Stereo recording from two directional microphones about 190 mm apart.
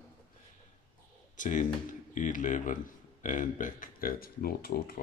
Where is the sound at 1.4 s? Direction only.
40° left (ahead or behind).